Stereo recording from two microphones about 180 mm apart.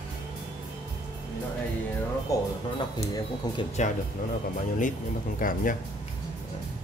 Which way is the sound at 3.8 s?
40° left (ahead or behind).